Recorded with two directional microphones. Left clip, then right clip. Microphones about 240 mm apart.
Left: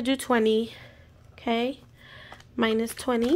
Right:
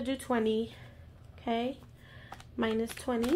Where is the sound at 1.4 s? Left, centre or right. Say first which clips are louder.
Left 6 dB; left.